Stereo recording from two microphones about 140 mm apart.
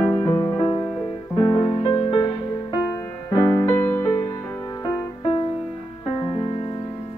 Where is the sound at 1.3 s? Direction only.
40° left (ahead or behind).